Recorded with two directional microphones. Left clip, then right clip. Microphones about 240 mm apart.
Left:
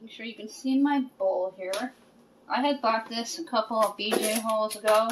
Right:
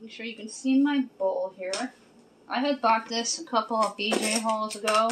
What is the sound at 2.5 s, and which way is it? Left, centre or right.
Speech, centre.